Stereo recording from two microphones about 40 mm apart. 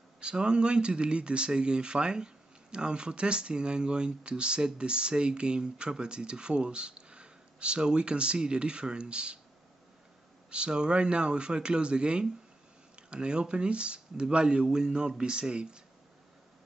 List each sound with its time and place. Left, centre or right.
0.2 s speech: right
10.5 s speech: right